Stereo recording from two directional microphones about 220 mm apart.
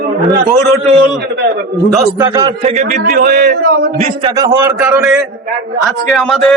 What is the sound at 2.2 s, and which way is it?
Speech, 15° right (ahead or behind).